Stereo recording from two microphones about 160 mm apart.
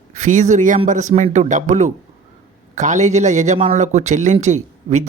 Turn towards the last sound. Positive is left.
turn(degrees=-45)  # may be behind; listen again after turning